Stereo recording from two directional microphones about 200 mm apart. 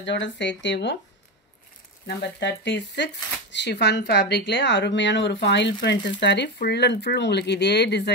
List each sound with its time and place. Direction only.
0.0 s speech: 65° left (ahead or behind)
2.0 s speech: 60° left (ahead or behind)